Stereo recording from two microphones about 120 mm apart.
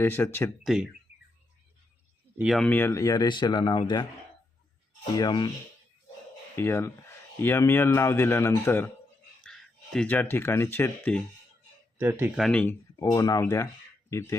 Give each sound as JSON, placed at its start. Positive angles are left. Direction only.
{"t": 0.0, "sound": "speech", "side_deg": 20}
{"t": 0.6, "sound": "speech", "side_deg": -5}
{"t": 2.6, "sound": "speech", "side_deg": 15}
{"t": 5.1, "sound": "speech", "side_deg": 40}
{"t": 6.6, "sound": "speech", "side_deg": 20}
{"t": 9.4, "sound": "a sound", "side_deg": 5}
{"t": 10.1, "sound": "speech", "side_deg": 15}
{"t": 11.9, "sound": "speech", "side_deg": -20}
{"t": 12.4, "sound": "speech", "side_deg": 10}
{"t": 13.0, "sound": "speech", "side_deg": 30}